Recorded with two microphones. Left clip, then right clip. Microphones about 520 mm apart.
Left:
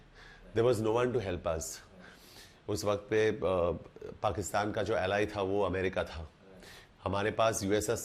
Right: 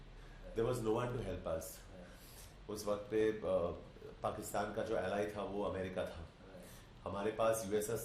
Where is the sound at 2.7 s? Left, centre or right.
Left.